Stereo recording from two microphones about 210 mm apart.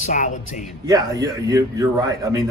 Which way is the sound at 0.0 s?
35° left (ahead or behind).